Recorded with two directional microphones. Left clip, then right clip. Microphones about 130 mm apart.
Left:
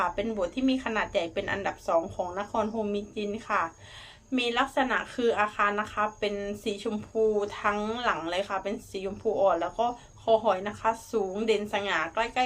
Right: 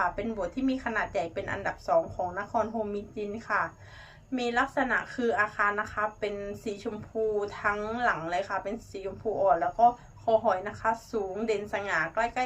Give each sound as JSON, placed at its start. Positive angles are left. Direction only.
{"t": 0.2, "sound": "speech", "side_deg": 45}